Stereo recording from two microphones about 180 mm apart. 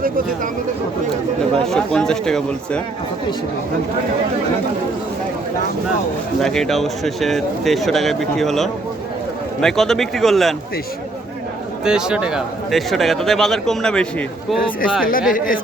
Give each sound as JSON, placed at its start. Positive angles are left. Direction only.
{"t": 1.6, "sound": "speech", "side_deg": 0}
{"t": 6.4, "sound": "speech", "side_deg": 0}
{"t": 11.9, "sound": "speech", "side_deg": -5}
{"t": 15.3, "sound": "speech", "side_deg": 50}